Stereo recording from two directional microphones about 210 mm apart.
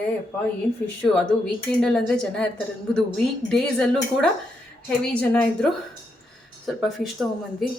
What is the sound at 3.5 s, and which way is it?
Speech, centre (ahead or behind).